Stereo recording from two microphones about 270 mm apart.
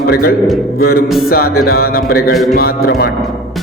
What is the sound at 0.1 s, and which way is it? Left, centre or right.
Music, left.